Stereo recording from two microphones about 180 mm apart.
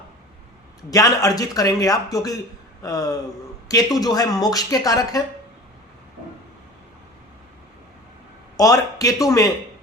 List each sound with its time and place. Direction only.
0.9 s speech: 20° left (ahead or behind)
8.5 s speech: 20° left (ahead or behind)